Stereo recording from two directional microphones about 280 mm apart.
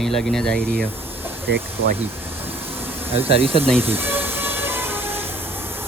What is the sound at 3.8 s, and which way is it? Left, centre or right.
Train, centre.